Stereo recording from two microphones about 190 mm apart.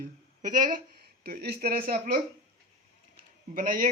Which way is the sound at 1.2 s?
55° right (ahead or behind).